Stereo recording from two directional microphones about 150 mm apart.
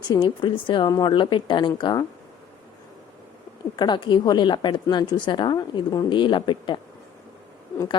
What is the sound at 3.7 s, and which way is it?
A woman's voice, 30° left (ahead or behind).